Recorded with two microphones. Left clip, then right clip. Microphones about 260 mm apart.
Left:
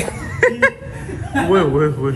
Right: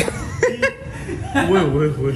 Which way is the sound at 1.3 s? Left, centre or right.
Centre.